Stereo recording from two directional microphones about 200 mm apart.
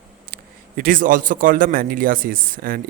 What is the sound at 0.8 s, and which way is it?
Speech, 45° right (ahead or behind).